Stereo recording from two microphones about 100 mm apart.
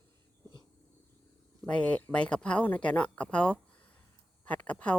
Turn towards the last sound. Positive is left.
turn(degrees=15)  # may be behind; listen again after turning